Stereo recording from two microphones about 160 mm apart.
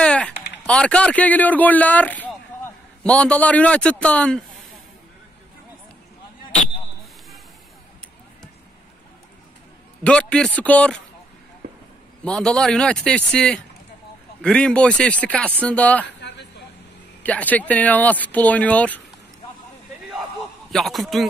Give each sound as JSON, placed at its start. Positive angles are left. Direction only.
{"t": 0.0, "sound": "a sound", "side_deg": 5}
{"t": 0.7, "sound": "speech", "side_deg": 5}
{"t": 10.0, "sound": "speech", "side_deg": 5}
{"t": 12.3, "sound": "speech", "side_deg": 5}
{"t": 16.2, "sound": "a sound", "side_deg": 90}
{"t": 17.2, "sound": "speech", "side_deg": 10}
{"t": 20.7, "sound": "speech", "side_deg": 0}